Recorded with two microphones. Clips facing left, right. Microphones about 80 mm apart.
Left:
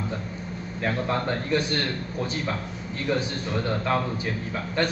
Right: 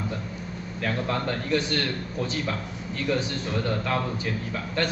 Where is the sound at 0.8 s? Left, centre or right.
Left.